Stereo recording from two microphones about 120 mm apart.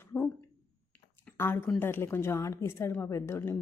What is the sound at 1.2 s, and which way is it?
Speech, 20° left (ahead or behind).